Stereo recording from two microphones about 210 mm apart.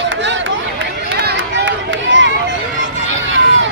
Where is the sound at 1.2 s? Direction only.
60° right (ahead or behind).